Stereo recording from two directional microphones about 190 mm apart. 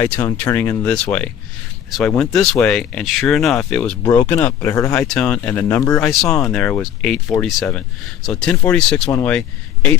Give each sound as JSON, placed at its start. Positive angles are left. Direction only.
{"t": 0.0, "sound": "speech", "side_deg": 10}
{"t": 6.0, "sound": "speech", "side_deg": 5}